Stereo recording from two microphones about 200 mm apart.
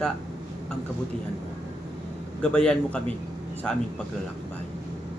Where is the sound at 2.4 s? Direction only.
5° left (ahead or behind).